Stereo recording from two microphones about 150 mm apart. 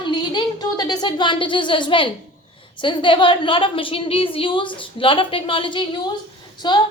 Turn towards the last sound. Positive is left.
turn(degrees=30)  # may be behind; listen again after turning